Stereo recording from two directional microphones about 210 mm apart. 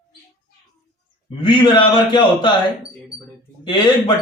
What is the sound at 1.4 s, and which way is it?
Speech, 20° left (ahead or behind).